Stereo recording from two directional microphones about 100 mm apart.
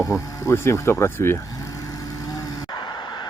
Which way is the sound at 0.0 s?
35° left (ahead or behind).